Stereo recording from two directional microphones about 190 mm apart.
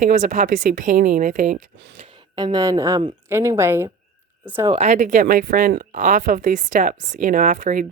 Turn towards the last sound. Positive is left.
turn(degrees=-45)  # may be behind; listen again after turning